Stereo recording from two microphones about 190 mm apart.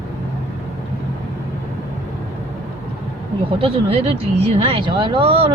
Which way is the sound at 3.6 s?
30° right (ahead or behind).